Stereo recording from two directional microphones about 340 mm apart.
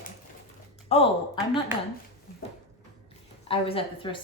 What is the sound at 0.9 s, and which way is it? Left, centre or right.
Speech, centre.